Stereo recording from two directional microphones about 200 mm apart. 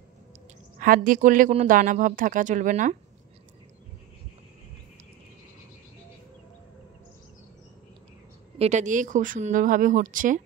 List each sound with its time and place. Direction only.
0.7 s speech: 45° right (ahead or behind)
8.5 s speech: 35° right (ahead or behind)